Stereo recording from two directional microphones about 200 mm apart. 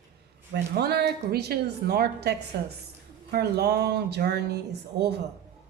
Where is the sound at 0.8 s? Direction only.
55° right (ahead or behind).